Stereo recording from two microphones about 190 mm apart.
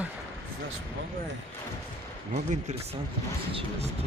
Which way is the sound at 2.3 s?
40° right (ahead or behind).